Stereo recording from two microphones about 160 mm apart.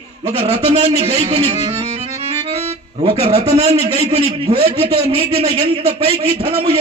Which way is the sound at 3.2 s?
40° right (ahead or behind).